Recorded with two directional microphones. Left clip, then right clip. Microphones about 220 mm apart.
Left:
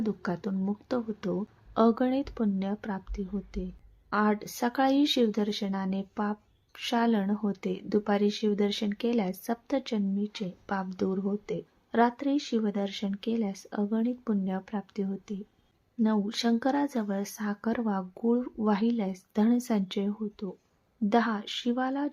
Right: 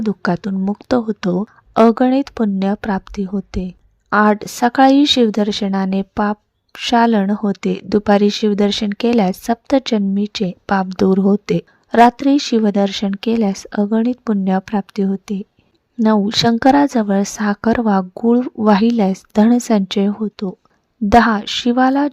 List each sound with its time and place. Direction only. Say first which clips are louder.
0.0 s a woman's voice: right 13 dB; 35° right (ahead or behind)